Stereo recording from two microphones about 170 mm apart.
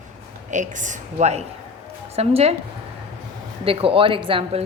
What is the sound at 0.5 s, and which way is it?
A woman's voice, 45° right (ahead or behind).